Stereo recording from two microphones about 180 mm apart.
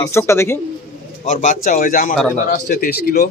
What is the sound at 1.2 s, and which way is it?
A man's voice, 45° left (ahead or behind).